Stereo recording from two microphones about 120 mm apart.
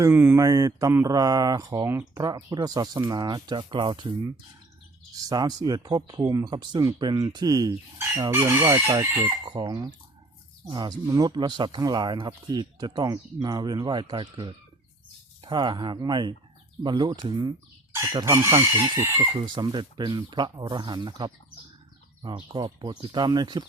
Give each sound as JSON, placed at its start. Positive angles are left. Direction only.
{"t": 0.0, "sound": "speech", "side_deg": -15}
{"t": 0.3, "sound": "speech", "side_deg": -30}
{"t": 2.1, "sound": "speech", "side_deg": -35}
{"t": 5.1, "sound": "speech", "side_deg": -35}
{"t": 8.3, "sound": "speech", "side_deg": -20}
{"t": 18.3, "sound": "speech", "side_deg": -25}
{"t": 19.2, "sound": "speech", "side_deg": -40}
{"t": 22.5, "sound": "speech", "side_deg": -35}